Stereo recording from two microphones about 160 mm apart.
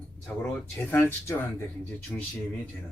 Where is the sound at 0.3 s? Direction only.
10° left (ahead or behind).